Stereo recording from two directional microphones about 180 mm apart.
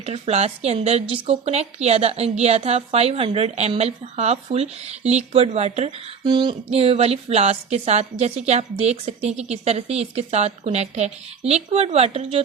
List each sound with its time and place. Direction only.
0.0 s a woman's voice: 35° right (ahead or behind)